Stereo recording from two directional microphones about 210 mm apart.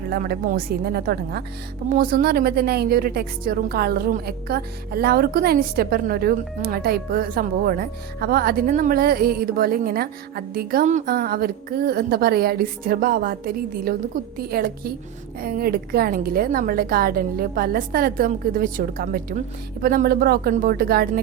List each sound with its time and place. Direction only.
0.1 s a woman's voice: 45° right (ahead or behind)